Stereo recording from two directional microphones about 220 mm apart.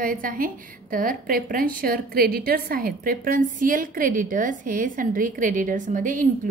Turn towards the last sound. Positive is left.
turn(degrees=-35)  # may be behind; listen again after turning